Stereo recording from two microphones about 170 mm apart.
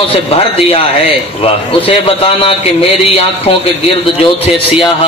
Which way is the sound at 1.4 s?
35° left (ahead or behind).